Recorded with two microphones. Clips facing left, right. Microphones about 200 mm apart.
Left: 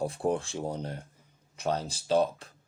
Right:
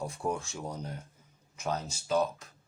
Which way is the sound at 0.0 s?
30° left (ahead or behind).